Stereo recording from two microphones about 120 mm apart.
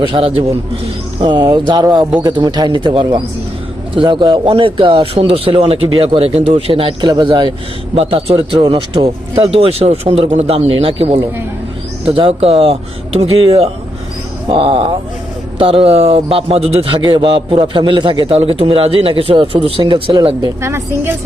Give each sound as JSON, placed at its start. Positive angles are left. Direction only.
{"t": 0.1, "sound": "a man's voice", "side_deg": -50}
{"t": 7.1, "sound": "speech", "side_deg": -40}
{"t": 7.9, "sound": "speech", "side_deg": -60}
{"t": 8.4, "sound": "a man's voice", "side_deg": -50}
{"t": 20.4, "sound": "a woman's voice", "side_deg": -25}